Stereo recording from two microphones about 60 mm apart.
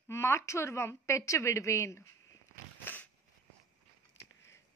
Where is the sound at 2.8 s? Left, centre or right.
Left.